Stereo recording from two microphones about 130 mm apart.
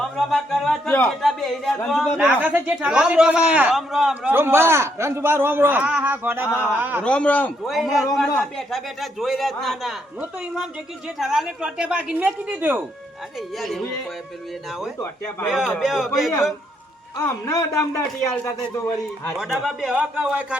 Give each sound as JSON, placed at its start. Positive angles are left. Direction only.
{"t": 0.0, "sound": "music", "side_deg": 0}
{"t": 1.0, "sound": "a man's voice", "side_deg": 0}
{"t": 2.1, "sound": "a man's voice", "side_deg": -10}
{"t": 7.0, "sound": "a man's voice", "side_deg": 10}
{"t": 7.7, "sound": "a man's voice", "side_deg": 0}
{"t": 13.6, "sound": "a man's voice", "side_deg": 0}
{"t": 17.2, "sound": "a man's voice", "side_deg": 25}
{"t": 18.7, "sound": "a man's voice", "side_deg": 20}
{"t": 19.4, "sound": "a man's voice", "side_deg": -5}